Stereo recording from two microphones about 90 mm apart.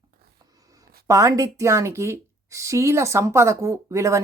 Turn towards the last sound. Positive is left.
turn(degrees=-35)  # may be behind; listen again after turning